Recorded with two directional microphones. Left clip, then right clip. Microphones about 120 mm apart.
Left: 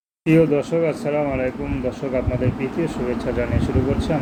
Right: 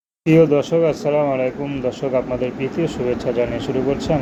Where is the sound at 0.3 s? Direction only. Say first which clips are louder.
Right 3 dB; 30° right (ahead or behind).